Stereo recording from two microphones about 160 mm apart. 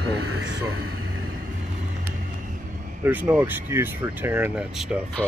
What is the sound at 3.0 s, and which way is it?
Speech, 10° right (ahead or behind).